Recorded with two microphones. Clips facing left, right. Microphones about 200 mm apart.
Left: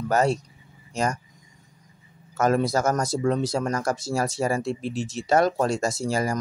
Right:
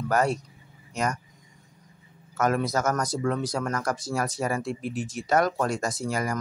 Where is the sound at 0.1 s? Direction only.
25° left (ahead or behind).